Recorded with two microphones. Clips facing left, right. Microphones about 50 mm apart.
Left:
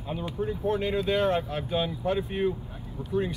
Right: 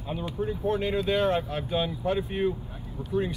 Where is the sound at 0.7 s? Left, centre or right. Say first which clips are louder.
Even; centre.